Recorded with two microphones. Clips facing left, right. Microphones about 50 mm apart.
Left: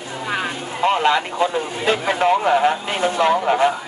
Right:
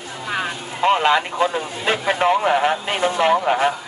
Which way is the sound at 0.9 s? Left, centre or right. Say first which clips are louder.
Right 1 dB; right.